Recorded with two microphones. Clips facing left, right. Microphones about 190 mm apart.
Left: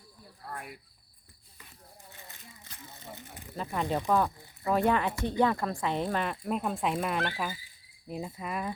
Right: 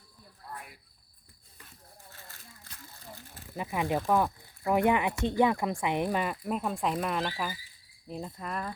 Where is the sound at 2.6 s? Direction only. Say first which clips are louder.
Left 3 dB; 20° left (ahead or behind).